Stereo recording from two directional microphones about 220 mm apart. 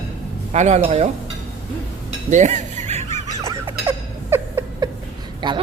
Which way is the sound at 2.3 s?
35° right (ahead or behind).